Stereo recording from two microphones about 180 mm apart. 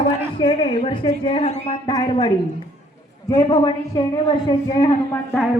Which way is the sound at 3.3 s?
35° left (ahead or behind).